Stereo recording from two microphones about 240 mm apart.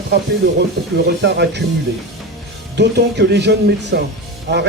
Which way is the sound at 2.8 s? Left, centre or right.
Right.